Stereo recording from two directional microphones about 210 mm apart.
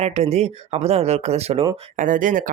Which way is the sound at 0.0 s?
30° right (ahead or behind).